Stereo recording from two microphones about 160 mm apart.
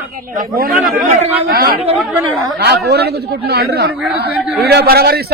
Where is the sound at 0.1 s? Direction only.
65° right (ahead or behind).